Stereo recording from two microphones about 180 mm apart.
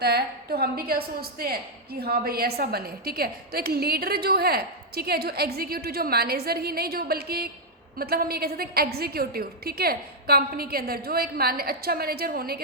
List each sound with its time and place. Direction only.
0.0 s a woman's voice: 60° right (ahead or behind)